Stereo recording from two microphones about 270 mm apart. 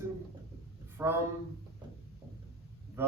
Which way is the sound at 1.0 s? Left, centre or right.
Centre.